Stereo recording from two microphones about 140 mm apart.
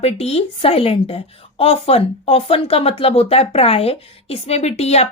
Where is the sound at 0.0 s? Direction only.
45° left (ahead or behind).